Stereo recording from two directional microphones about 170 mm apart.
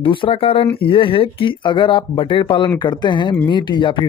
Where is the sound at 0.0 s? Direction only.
30° left (ahead or behind).